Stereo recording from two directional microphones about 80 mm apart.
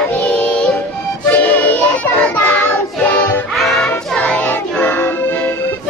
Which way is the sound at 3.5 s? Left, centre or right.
Centre.